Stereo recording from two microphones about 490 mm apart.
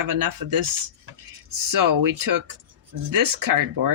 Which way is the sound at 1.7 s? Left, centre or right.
Right.